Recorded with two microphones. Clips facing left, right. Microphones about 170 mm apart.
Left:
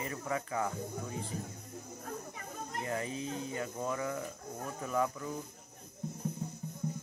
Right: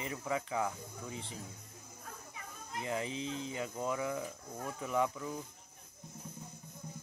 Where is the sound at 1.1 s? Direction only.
45° left (ahead or behind).